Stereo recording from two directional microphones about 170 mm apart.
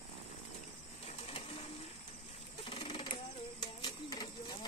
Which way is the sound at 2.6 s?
35° left (ahead or behind).